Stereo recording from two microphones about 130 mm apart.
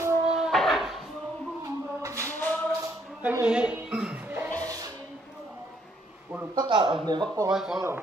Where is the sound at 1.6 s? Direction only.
25° right (ahead or behind).